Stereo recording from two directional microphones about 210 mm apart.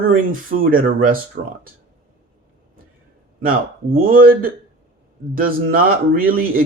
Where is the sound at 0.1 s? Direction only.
40° right (ahead or behind).